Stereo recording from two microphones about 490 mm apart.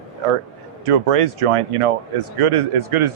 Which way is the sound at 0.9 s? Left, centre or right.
Right.